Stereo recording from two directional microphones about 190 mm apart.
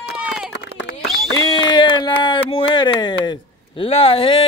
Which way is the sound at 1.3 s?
20° left (ahead or behind).